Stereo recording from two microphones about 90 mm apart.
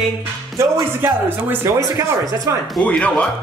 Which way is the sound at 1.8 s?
40° right (ahead or behind).